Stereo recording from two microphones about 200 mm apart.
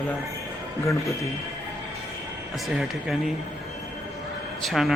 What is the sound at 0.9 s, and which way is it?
Speech, 15° left (ahead or behind).